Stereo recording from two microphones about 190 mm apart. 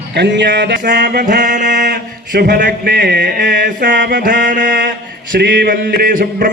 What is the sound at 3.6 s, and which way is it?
Mantra, 45° right (ahead or behind).